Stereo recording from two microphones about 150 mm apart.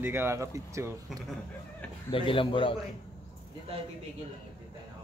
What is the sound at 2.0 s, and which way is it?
Speech, 35° left (ahead or behind).